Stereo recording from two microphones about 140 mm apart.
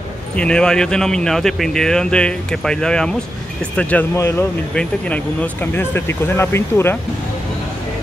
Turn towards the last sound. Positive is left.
turn(degrees=15)  # may be behind; listen again after turning